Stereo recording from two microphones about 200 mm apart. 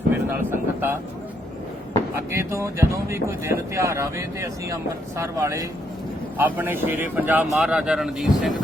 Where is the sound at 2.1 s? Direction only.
15° right (ahead or behind).